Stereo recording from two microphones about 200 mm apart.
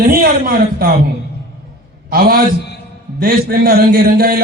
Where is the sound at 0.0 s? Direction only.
45° right (ahead or behind).